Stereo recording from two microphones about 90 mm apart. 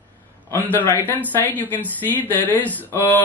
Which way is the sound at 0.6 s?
20° left (ahead or behind).